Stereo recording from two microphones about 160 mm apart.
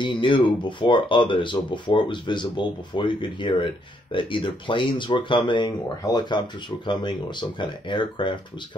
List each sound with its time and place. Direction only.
0.0 s speech: 30° left (ahead or behind)